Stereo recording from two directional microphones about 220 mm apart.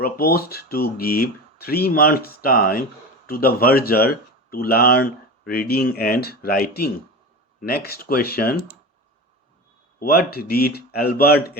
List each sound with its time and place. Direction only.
0.0 s speech: 45° left (ahead or behind)
10.0 s speech: 45° left (ahead or behind)